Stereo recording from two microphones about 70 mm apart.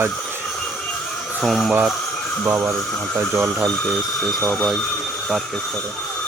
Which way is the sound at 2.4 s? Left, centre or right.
Right.